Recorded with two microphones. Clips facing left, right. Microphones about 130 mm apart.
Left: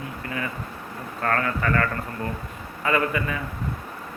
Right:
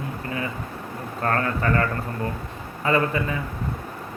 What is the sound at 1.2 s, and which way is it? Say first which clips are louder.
Speech: right 1 dB; 30° right (ahead or behind).